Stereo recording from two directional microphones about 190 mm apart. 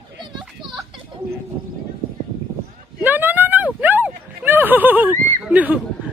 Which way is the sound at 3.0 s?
10° right (ahead or behind).